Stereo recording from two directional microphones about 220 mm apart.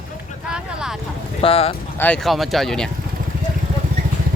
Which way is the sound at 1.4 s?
25° left (ahead or behind).